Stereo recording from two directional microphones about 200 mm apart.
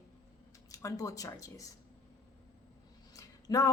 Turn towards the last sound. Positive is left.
turn(degrees=15)  # may be behind; listen again after turning